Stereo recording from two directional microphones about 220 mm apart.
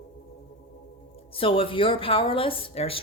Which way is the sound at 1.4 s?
25° left (ahead or behind).